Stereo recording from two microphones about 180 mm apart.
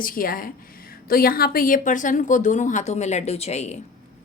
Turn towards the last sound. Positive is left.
turn(degrees=40)  # may be behind; listen again after turning